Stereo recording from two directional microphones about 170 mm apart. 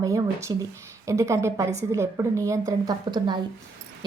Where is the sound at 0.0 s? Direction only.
20° right (ahead or behind).